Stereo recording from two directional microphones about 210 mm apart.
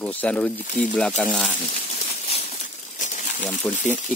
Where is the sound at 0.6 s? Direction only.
40° left (ahead or behind).